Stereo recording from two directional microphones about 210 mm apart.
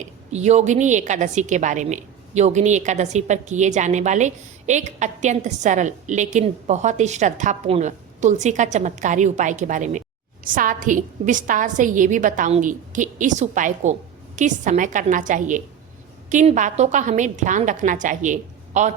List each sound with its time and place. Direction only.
0.0 s a woman's voice: 30° right (ahead or behind)